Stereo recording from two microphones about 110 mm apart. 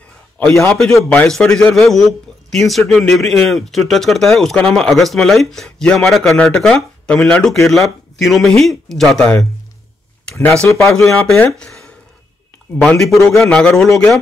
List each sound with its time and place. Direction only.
0.4 s a man's voice: 25° left (ahead or behind)
0.7 s speech: 5° left (ahead or behind)
10.9 s speech: 5° left (ahead or behind)
11.5 s a sound: 5° left (ahead or behind)
12.8 s speech: 5° left (ahead or behind)